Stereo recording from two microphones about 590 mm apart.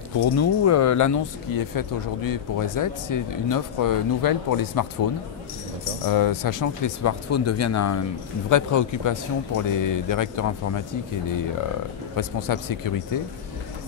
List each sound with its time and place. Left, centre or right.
0.4 s speech: left
6.0 s speech: left
12.2 s speech: left